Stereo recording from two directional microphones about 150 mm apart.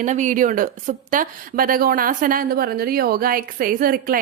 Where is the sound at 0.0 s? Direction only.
55° right (ahead or behind).